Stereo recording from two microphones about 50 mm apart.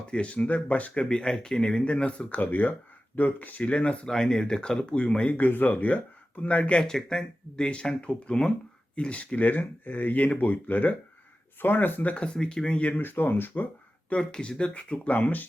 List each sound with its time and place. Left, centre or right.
0.1 s speech: left
1.0 s speech: centre
2.4 s speech: left
4.0 s speech: centre
6.8 s speech: centre; by 12.1 s left
12.1 s speech: left
12.9 s speech: left
14.1 s speech: centre; by 15.4 s left